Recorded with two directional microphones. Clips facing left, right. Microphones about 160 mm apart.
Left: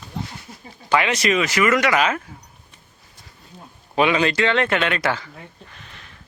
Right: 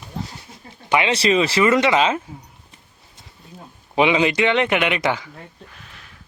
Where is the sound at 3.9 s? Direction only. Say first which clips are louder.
Right 1 dB; 20° right (ahead or behind).